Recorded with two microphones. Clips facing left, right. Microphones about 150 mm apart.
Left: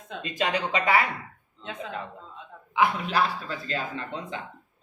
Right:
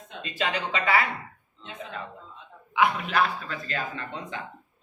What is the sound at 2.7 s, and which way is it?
Speech, 30° left (ahead or behind).